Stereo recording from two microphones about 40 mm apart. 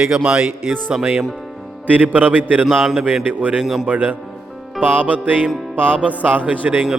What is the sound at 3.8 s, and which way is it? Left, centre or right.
A man's voice, right.